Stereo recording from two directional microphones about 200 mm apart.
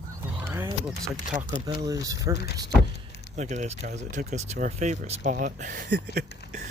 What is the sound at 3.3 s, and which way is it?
Speech, 35° right (ahead or behind).